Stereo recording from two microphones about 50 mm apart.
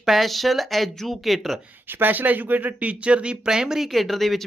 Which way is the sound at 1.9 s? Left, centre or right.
Right.